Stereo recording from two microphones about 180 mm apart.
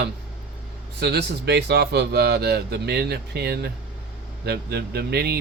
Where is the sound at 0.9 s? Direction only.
65° right (ahead or behind).